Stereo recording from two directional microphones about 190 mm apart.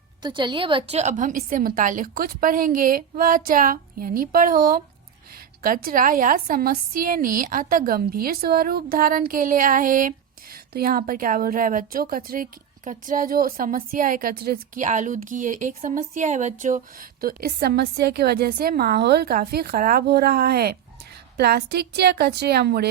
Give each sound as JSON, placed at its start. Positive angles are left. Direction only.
{"t": 0.2, "sound": "a woman's voice", "side_deg": -25}